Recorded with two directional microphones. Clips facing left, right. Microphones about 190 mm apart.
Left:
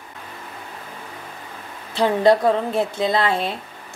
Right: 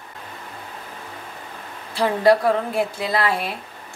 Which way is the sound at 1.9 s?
20° left (ahead or behind).